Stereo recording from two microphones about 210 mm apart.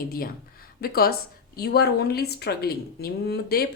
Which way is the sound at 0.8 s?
45° left (ahead or behind).